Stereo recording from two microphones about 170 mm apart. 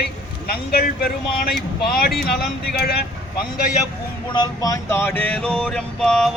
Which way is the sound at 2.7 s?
70° left (ahead or behind).